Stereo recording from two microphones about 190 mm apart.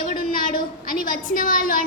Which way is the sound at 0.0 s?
45° left (ahead or behind).